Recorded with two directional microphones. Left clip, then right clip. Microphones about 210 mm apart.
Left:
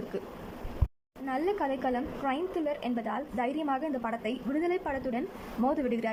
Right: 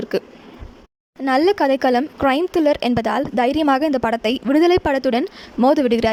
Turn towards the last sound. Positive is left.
turn(degrees=-45)  # may be behind; listen again after turning